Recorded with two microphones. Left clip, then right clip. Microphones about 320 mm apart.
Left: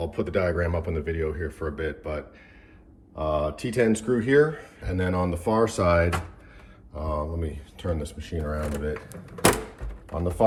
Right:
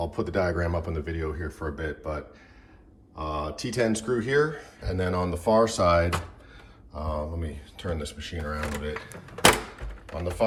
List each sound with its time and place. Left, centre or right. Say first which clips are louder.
0.0 s speech: left 1 dB; centre